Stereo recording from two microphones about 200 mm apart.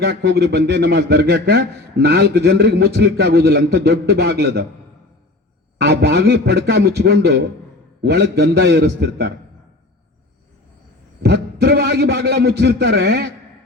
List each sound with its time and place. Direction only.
0.0 s a man's voice: 55° right (ahead or behind)
5.8 s a man's voice: 55° right (ahead or behind)
11.2 s a man's voice: 55° right (ahead or behind)